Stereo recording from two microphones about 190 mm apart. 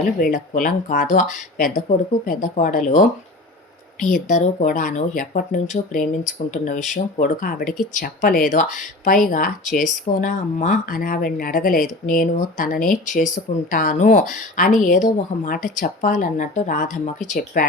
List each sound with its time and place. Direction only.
0.2 s speech: 45° left (ahead or behind)